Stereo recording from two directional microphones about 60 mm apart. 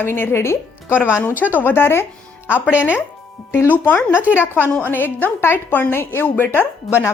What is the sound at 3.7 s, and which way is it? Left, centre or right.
A woman's voice, left.